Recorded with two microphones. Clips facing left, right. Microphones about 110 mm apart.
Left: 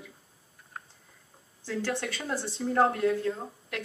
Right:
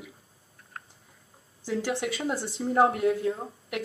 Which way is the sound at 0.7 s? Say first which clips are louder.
Even; centre (ahead or behind).